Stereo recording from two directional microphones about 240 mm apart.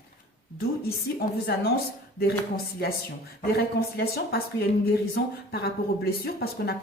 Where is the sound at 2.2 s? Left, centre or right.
Left.